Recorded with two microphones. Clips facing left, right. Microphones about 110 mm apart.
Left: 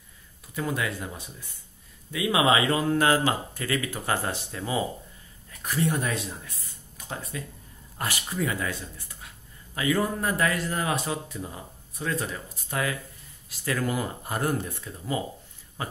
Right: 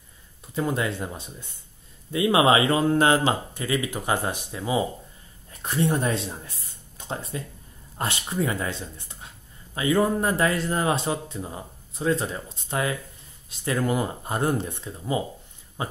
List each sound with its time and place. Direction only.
0.6 s speech: 25° right (ahead or behind)
5.5 s speech: 25° right (ahead or behind)